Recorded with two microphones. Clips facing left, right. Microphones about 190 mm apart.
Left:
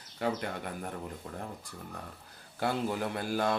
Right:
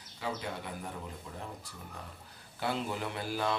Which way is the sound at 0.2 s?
60° left (ahead or behind).